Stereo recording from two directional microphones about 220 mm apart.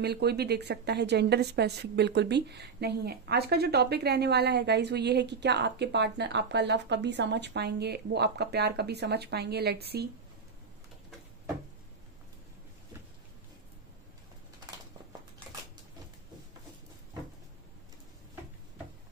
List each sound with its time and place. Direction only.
0.0 s a woman's voice: 50° right (ahead or behind)